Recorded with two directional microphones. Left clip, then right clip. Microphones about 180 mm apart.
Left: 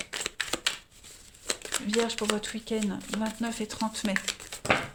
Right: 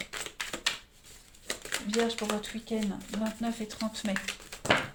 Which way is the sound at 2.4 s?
55° left (ahead or behind).